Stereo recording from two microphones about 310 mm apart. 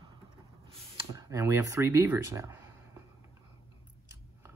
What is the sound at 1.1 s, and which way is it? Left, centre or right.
Speech, centre.